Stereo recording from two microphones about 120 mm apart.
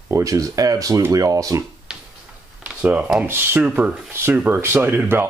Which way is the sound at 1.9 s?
5° right (ahead or behind).